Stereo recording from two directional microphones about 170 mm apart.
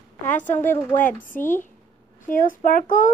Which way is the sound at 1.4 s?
10° left (ahead or behind).